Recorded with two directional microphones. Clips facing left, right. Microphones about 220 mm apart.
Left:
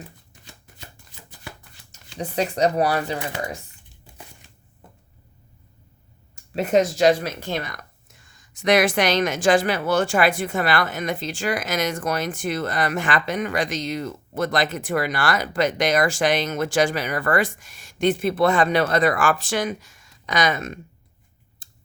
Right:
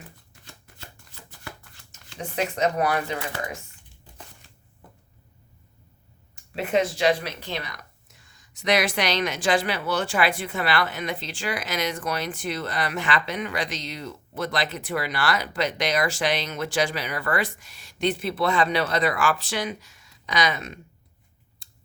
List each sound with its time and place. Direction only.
0.4 s shuffling cards: 15° left (ahead or behind)
2.1 s speech: 35° left (ahead or behind)
3.2 s speech: 20° left (ahead or behind)
4.0 s crushing: 10° left (ahead or behind)
4.8 s a sound: 25° left (ahead or behind)
6.3 s speech: 45° left (ahead or behind)
21.6 s scissors: 50° left (ahead or behind)